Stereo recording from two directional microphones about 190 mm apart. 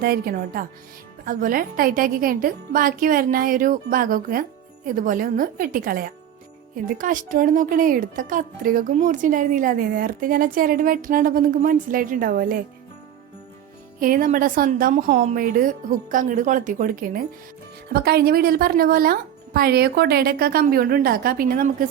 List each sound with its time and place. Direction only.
0.0 s a woman's voice: 50° right (ahead or behind)
14.0 s a woman's voice: 45° right (ahead or behind)